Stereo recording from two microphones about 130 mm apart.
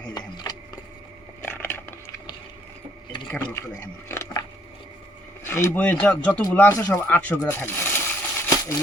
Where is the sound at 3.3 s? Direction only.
10° left (ahead or behind).